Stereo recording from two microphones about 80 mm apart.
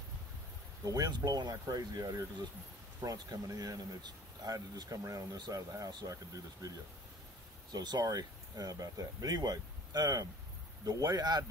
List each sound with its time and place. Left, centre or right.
0.8 s speech: right
7.7 s speech: right